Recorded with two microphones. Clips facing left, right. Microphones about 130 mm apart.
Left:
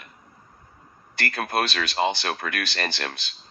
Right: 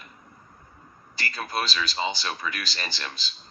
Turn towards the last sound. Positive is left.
turn(degrees=60)  # may be behind; listen again after turning